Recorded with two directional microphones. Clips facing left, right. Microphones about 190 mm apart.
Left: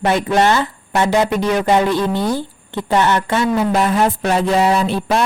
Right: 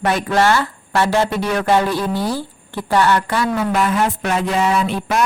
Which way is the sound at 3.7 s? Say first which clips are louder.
Left 2 dB; 35° left (ahead or behind).